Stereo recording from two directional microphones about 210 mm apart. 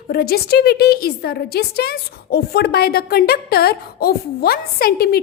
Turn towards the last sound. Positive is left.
turn(degrees=45)  # may be behind; listen again after turning